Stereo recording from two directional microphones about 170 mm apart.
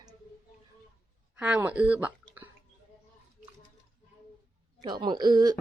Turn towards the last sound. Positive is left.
turn(degrees=-25)  # may be behind; listen again after turning